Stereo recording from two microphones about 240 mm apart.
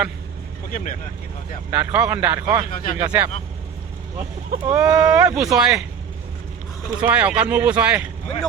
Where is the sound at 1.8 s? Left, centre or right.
Centre.